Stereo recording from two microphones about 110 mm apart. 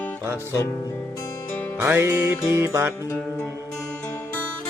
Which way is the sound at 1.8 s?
20° right (ahead or behind).